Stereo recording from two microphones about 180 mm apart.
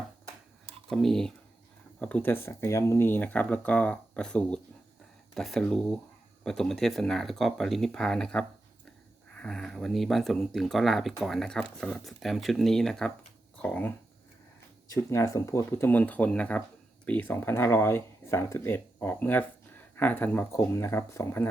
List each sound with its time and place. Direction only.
0.9 s speech: centre (ahead or behind)